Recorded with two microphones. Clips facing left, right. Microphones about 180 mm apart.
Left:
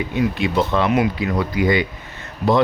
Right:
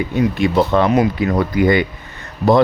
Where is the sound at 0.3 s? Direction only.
45° right (ahead or behind).